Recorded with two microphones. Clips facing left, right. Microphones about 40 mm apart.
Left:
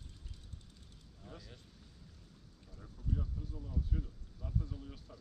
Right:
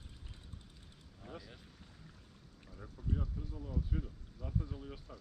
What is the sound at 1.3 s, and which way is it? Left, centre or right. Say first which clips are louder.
Speech: right 3 dB; centre.